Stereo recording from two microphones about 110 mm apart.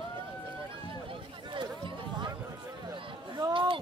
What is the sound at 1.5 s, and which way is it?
Run, 45° right (ahead or behind).